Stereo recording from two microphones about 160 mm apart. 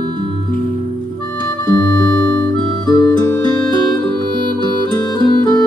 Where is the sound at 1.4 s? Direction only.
25° left (ahead or behind).